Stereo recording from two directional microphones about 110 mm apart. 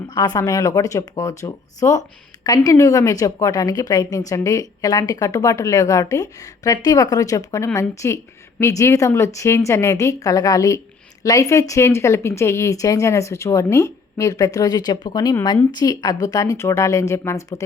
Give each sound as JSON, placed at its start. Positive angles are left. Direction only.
{"t": 0.1, "sound": "a woman's voice", "side_deg": 35}